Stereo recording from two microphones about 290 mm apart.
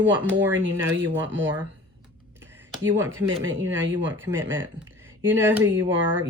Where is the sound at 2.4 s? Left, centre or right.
Centre.